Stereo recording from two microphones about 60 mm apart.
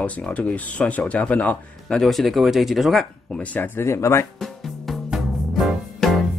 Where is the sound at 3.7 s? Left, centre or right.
Left.